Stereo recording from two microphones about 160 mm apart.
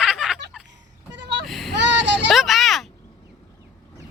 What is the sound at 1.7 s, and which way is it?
Child singing, 90° right.